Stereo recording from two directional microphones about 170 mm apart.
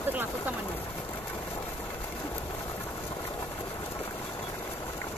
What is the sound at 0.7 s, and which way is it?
Engine, 10° left (ahead or behind).